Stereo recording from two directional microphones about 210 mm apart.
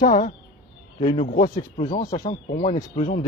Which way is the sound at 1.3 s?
35° left (ahead or behind).